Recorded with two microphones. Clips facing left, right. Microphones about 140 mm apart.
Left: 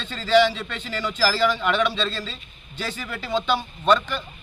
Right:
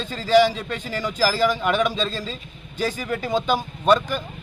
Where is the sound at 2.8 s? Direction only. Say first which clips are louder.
Right 6 dB; 45° right (ahead or behind).